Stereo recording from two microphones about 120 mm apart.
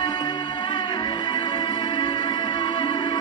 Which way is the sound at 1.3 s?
35° left (ahead or behind).